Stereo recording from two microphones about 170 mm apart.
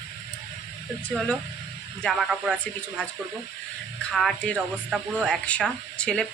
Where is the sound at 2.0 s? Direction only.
5° right (ahead or behind).